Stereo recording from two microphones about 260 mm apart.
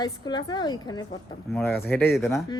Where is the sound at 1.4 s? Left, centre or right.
Centre.